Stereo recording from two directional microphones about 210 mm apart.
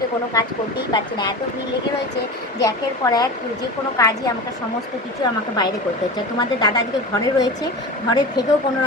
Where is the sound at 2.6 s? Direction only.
15° left (ahead or behind).